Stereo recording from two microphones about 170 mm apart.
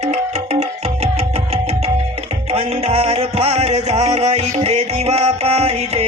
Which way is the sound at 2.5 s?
35° right (ahead or behind).